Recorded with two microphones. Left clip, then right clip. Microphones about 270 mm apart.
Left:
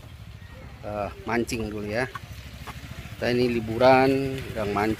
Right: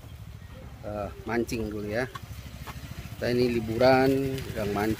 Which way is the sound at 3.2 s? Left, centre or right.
Centre.